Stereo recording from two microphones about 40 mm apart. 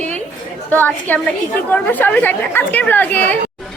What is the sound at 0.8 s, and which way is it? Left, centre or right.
A woman's voice, left.